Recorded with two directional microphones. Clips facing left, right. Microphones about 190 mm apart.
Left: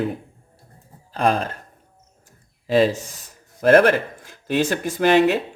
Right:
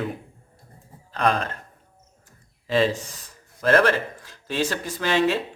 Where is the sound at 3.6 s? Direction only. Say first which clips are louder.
Left 5 dB; 50° left (ahead or behind).